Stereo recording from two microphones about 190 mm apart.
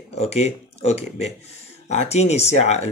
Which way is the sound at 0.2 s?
35° left (ahead or behind).